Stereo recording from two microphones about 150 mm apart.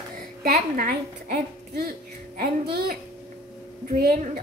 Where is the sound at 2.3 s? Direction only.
90° right.